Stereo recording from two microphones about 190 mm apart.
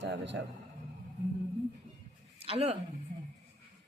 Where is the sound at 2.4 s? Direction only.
30° right (ahead or behind).